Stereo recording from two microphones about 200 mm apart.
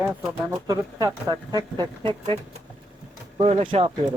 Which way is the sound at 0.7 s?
15° right (ahead or behind).